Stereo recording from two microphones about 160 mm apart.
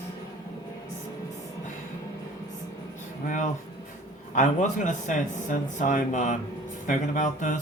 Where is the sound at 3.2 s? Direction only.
50° left (ahead or behind).